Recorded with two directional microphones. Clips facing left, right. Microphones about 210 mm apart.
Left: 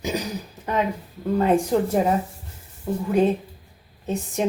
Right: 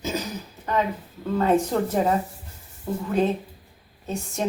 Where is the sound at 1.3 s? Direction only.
10° left (ahead or behind).